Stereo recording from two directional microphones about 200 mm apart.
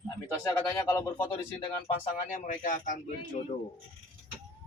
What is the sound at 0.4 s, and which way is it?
Speech, 15° left (ahead or behind).